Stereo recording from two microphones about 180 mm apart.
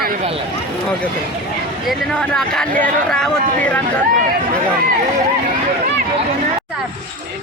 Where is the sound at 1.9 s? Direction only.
Centre (ahead or behind).